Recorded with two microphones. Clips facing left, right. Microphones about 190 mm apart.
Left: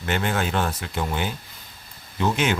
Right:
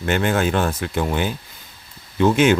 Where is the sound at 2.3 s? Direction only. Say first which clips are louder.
Right 9 dB; 50° right (ahead or behind).